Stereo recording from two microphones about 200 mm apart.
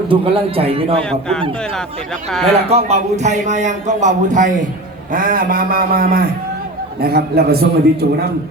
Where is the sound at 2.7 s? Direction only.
30° right (ahead or behind).